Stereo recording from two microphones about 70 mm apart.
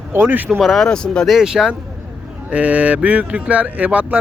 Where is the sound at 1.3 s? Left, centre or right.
Centre.